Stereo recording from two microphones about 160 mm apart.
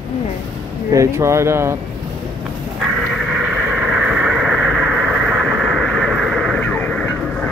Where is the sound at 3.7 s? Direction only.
5° right (ahead or behind).